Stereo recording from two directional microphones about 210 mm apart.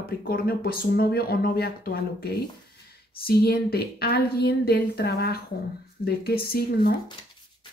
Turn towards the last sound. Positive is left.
turn(degrees=45)  # may be behind; listen again after turning